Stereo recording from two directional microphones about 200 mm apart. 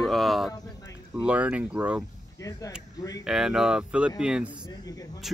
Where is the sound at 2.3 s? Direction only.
15° left (ahead or behind).